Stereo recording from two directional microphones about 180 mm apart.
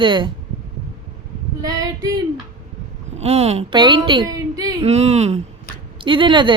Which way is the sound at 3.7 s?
25° right (ahead or behind).